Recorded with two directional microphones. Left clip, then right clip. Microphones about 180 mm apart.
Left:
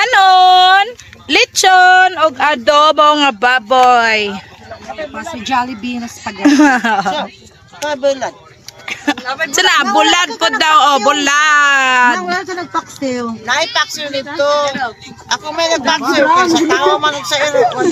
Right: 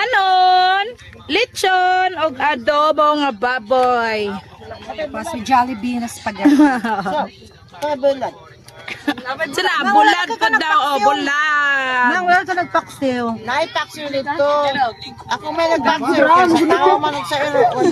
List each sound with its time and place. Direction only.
0.0 s a sound: 20° left (ahead or behind)
2.8 s speech: centre (ahead or behind)
5.5 s speech: 45° right (ahead or behind)
6.4 s speech: centre (ahead or behind)
7.8 s speech: centre (ahead or behind)
8.8 s a sound: 35° left (ahead or behind)
9.2 s speech: 5° left (ahead or behind)
9.5 s speech: 25° left (ahead or behind)
12.2 s a woman's voice: 15° right (ahead or behind)